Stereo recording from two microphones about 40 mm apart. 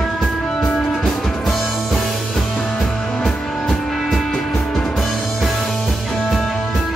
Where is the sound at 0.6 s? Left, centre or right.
Left.